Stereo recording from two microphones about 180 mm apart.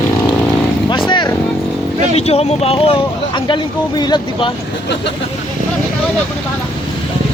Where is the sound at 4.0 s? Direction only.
25° left (ahead or behind).